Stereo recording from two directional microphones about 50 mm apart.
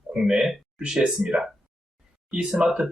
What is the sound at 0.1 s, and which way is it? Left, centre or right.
Speech, centre.